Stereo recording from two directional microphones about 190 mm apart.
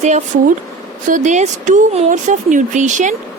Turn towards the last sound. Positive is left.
turn(degrees=-40)  # may be behind; listen again after turning